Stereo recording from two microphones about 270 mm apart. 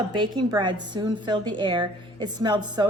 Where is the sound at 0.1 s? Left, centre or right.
Centre.